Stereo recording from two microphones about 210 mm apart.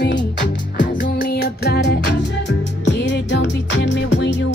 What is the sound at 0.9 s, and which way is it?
Music, 45° left (ahead or behind).